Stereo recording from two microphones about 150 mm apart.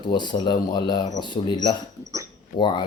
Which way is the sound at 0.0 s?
30° left (ahead or behind).